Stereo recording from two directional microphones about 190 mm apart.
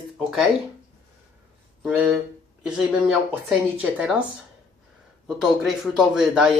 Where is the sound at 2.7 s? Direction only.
5° right (ahead or behind).